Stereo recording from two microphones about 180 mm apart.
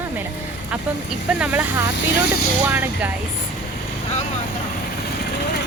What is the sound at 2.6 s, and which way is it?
Speech, 10° right (ahead or behind).